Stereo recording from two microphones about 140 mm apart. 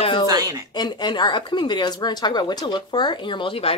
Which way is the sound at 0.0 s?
40° left (ahead or behind).